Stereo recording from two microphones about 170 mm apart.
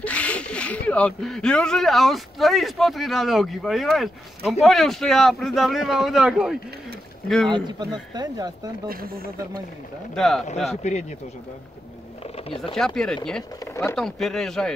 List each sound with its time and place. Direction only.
0.0 s speech: 10° left (ahead or behind)
7.5 s speech: 25° right (ahead or behind)
8.8 s speech: 60° right (ahead or behind)
10.1 s speech: centre (ahead or behind)
10.8 s speech: 45° left (ahead or behind)
12.4 s speech: 35° left (ahead or behind)
12.7 s speech: 5° left (ahead or behind)